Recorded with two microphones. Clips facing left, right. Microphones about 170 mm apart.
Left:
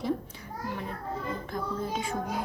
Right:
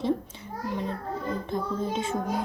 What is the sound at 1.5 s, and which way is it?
Speech, 25° right (ahead or behind).